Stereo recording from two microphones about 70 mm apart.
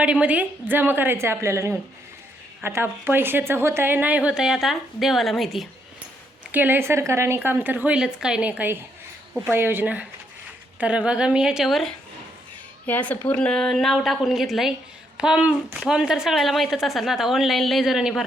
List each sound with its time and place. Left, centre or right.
0.0 s a woman's voice: centre
6.5 s speech: right
7.9 s a woman's voice: centre
8.4 s a woman's voice: right; by 11.9 s centre
12.8 s a woman's voice: left; by 14.7 s centre
15.2 s a woman's voice: centre